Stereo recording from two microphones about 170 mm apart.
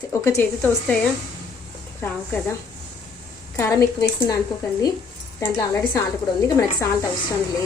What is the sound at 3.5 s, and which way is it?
Speech, 20° left (ahead or behind).